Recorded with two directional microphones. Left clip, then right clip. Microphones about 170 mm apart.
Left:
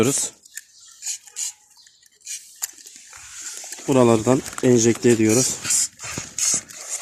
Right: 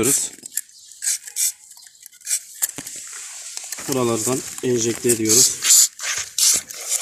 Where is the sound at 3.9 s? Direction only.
50° left (ahead or behind).